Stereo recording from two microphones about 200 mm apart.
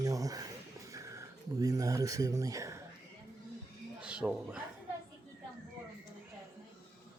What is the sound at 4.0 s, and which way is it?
Speech, 5° right (ahead or behind).